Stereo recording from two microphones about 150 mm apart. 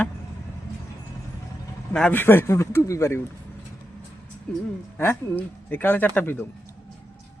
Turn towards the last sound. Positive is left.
turn(degrees=15)  # may be behind; listen again after turning